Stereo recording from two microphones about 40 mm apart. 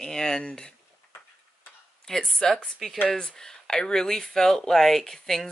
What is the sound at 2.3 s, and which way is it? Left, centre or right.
Speech, centre.